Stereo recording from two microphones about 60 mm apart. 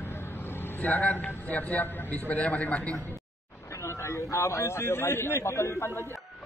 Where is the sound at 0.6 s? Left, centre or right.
Left.